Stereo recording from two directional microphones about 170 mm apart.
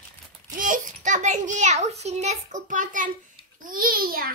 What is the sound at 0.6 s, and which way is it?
A child's voice, 50° right (ahead or behind).